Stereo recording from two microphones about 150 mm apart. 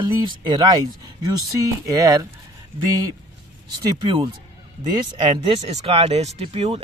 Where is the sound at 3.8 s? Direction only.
30° right (ahead or behind).